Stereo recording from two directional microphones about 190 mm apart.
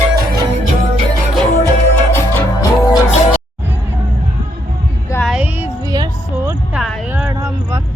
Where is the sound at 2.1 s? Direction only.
10° left (ahead or behind).